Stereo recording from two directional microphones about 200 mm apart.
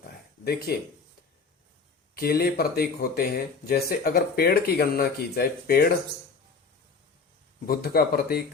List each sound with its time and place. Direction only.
0.7 s speech: 50° left (ahead or behind)
2.1 s speech: 50° left (ahead or behind)
7.7 s speech: 50° left (ahead or behind)